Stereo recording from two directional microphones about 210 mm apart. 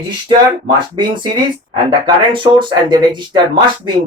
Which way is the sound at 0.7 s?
20° right (ahead or behind).